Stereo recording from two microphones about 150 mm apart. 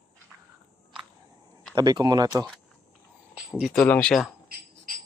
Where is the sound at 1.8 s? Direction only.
30° right (ahead or behind).